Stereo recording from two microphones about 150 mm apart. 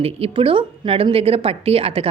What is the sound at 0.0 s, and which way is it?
A woman's voice, 40° right (ahead or behind).